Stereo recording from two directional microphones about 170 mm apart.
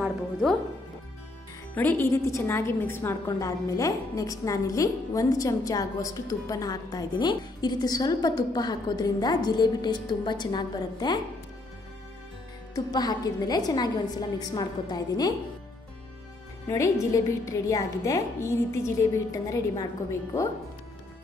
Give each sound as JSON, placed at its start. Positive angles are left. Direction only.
{"t": 0.0, "sound": "music", "side_deg": 0}
{"t": 1.8, "sound": "a woman's voice", "side_deg": 10}
{"t": 12.7, "sound": "a woman's voice", "side_deg": 25}
{"t": 16.6, "sound": "a woman's voice", "side_deg": 15}